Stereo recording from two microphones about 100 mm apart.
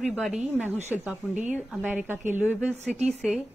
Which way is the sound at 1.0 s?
15° right (ahead or behind).